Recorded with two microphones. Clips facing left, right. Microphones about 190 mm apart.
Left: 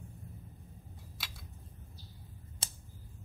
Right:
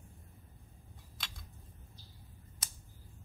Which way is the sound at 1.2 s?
5° left (ahead or behind).